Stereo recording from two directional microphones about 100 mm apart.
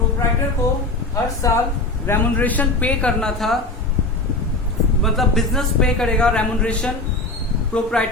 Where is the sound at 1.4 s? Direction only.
35° left (ahead or behind).